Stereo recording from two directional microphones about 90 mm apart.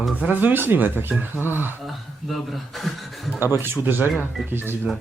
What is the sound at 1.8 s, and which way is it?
Speech, centre (ahead or behind).